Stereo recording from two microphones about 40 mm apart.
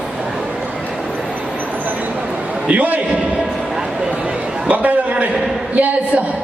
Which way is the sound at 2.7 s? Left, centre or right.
Right.